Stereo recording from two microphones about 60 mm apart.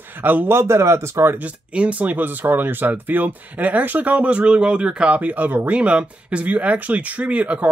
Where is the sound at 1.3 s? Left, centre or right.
Right.